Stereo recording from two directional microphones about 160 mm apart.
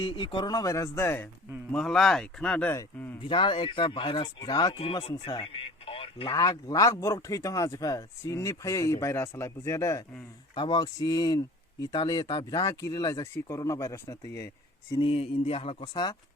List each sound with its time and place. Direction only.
0.0 s speech: 30° left (ahead or behind); by 1.3 s 15° left (ahead or behind)
1.7 s speech: 5° left (ahead or behind)
3.2 s speech: 30° left (ahead or behind)
6.3 s speech: 25° left (ahead or behind)
15.0 s speech: 35° left (ahead or behind)